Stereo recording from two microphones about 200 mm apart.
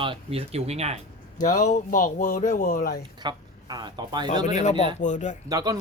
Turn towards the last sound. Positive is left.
turn(degrees=-20)  # may be behind; listen again after turning